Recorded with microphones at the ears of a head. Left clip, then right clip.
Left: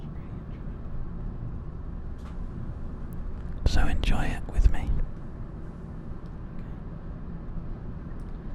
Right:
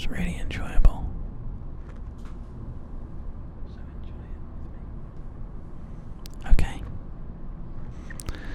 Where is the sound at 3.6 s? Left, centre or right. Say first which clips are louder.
Left 16 dB; left.